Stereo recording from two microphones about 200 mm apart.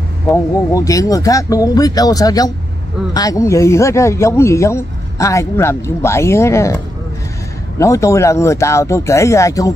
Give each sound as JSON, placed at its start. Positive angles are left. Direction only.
{"t": 0.3, "sound": "speech", "side_deg": 15}
{"t": 7.8, "sound": "speech", "side_deg": 15}